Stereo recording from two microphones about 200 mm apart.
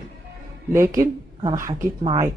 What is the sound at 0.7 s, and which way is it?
Speech, 15° right (ahead or behind).